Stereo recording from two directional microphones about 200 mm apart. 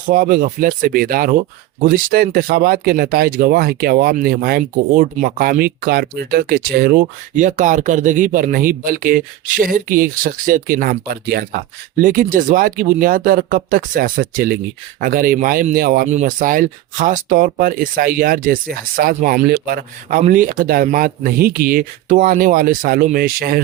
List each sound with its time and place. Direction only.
0.1 s speech: 45° right (ahead or behind)